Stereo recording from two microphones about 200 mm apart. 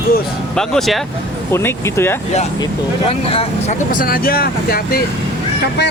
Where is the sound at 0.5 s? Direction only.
Centre (ahead or behind).